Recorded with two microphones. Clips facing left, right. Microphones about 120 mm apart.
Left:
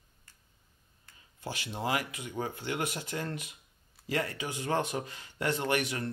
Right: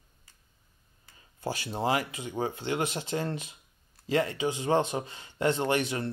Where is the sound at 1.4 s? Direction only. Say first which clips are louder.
Right 5 dB; 35° right (ahead or behind).